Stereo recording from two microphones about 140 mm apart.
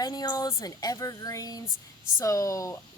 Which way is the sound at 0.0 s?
25° left (ahead or behind).